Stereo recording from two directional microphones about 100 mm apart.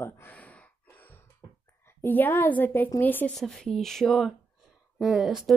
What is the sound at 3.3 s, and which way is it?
Speech, 5° left (ahead or behind).